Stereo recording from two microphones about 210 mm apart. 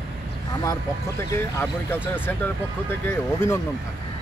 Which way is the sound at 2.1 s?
10° left (ahead or behind).